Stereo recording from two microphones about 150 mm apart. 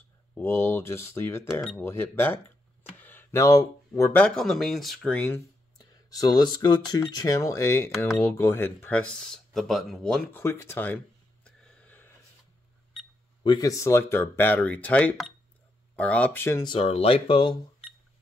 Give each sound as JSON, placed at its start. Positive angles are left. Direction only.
{"t": 0.3, "sound": "speech", "side_deg": 15}
{"t": 1.5, "sound": "speech", "side_deg": 0}
{"t": 1.8, "sound": "speech", "side_deg": 15}
{"t": 4.4, "sound": "speech", "side_deg": 0}
{"t": 5.8, "sound": "speech", "side_deg": 25}
{"t": 10.4, "sound": "speech", "side_deg": 15}
{"t": 11.4, "sound": "a sound", "side_deg": 5}
{"t": 13.4, "sound": "speech", "side_deg": 25}
{"t": 16.6, "sound": "speech", "side_deg": 40}